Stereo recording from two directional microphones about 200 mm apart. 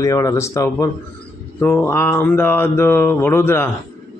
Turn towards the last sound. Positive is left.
turn(degrees=10)  # may be behind; listen again after turning